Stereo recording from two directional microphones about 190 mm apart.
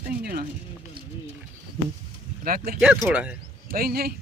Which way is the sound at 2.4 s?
50° right (ahead or behind).